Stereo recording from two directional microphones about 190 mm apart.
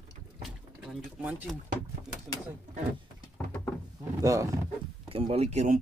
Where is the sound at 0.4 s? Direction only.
5° right (ahead or behind).